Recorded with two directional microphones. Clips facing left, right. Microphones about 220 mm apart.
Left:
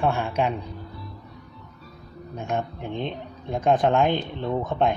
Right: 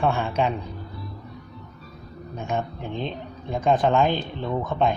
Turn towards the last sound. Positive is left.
turn(degrees=20)  # may be behind; listen again after turning